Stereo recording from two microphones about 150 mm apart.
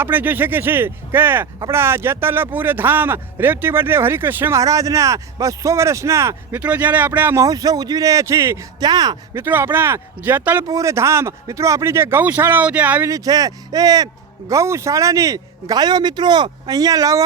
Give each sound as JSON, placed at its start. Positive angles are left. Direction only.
{"t": 0.0, "sound": "speech", "side_deg": -10}
{"t": 9.4, "sound": "speech", "side_deg": -15}
{"t": 13.1, "sound": "speech", "side_deg": -25}